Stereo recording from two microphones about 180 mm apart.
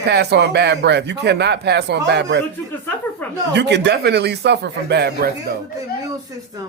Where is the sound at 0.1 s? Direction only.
65° right (ahead or behind).